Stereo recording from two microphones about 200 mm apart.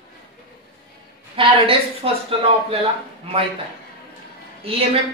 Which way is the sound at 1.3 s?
25° right (ahead or behind).